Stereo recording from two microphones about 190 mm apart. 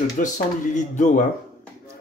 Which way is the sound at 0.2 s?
45° left (ahead or behind).